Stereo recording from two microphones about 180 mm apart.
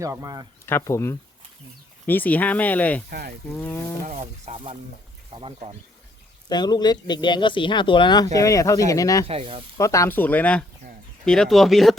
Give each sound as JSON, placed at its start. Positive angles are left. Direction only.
{"t": 0.0, "sound": "speech", "side_deg": -15}
{"t": 0.6, "sound": "speech", "side_deg": 15}
{"t": 3.1, "sound": "speech", "side_deg": -60}
{"t": 4.0, "sound": "sizzle", "side_deg": -40}
{"t": 6.5, "sound": "speech", "side_deg": 25}
{"t": 9.2, "sound": "sizzle", "side_deg": -30}
{"t": 9.7, "sound": "speech", "side_deg": 15}